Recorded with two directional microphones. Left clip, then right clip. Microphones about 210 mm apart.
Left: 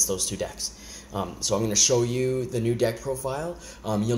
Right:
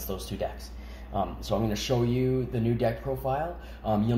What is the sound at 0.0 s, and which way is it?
Speech, 50° left (ahead or behind).